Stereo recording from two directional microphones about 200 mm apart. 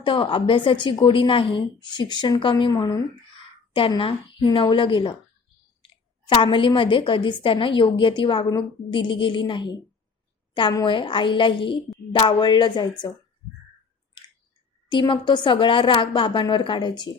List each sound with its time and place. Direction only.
0.0 s a woman's voice: 25° left (ahead or behind)
14.8 s a woman's voice: 25° left (ahead or behind)